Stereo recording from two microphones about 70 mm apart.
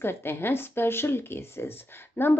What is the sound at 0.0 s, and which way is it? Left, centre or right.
Speech, left.